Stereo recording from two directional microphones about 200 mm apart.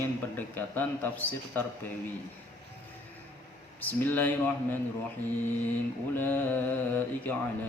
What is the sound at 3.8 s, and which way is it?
Speech, 10° left (ahead or behind).